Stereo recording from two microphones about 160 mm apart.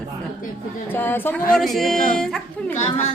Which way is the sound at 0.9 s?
10° left (ahead or behind).